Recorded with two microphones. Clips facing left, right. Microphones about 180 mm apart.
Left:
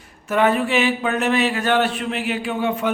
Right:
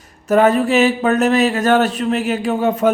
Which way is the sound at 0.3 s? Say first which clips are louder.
Right 5 dB; 40° right (ahead or behind).